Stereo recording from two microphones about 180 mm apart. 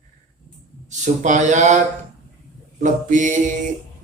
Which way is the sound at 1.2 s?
45° right (ahead or behind).